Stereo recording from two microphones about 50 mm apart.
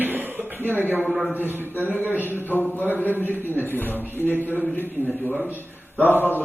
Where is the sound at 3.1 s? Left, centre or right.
Right.